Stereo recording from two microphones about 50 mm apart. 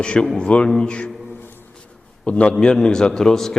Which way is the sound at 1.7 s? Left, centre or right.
Left.